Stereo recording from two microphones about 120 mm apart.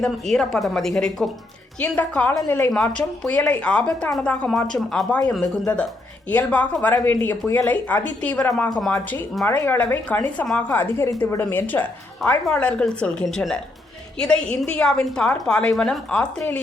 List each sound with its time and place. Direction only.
0.0 s a woman's voice: 5° left (ahead or behind); by 2.7 s 20° left (ahead or behind)
2.7 s a woman's voice: 10° left (ahead or behind)
6.2 s a woman's voice: 10° left (ahead or behind)